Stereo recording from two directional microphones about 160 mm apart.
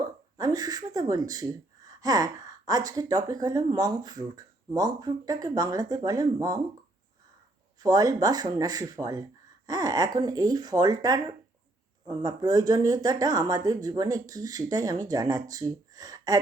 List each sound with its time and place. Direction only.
0.0 s speech: 25° right (ahead or behind)
7.8 s speech: 25° right (ahead or behind)